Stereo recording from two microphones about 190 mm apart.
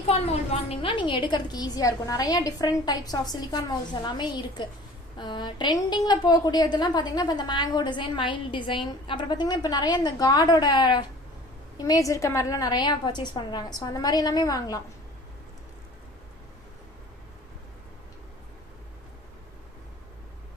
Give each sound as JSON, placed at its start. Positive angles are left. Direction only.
{"t": 0.1, "sound": "a woman's voice", "side_deg": 30}